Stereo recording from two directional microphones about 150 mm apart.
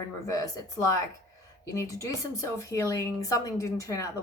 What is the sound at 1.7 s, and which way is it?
Speech, 20° left (ahead or behind).